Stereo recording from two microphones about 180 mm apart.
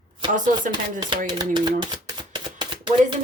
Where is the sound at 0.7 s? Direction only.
25° right (ahead or behind).